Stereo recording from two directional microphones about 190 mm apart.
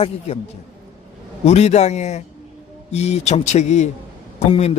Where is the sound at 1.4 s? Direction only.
35° left (ahead or behind).